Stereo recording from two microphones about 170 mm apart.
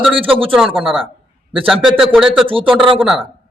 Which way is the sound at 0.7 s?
30° right (ahead or behind).